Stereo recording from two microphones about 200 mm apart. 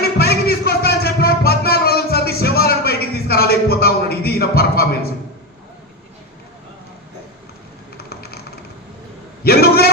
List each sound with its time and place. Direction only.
0.0 s music: 50° left (ahead or behind)
7.9 s typing: 50° left (ahead or behind)
9.4 s a sound: 50° left (ahead or behind)